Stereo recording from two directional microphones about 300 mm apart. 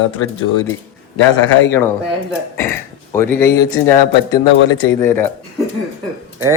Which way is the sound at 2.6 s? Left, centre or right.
Centre.